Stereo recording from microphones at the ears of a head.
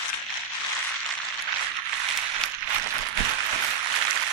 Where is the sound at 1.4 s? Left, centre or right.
Right.